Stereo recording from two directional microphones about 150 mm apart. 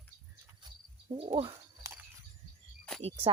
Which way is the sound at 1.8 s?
20° right (ahead or behind).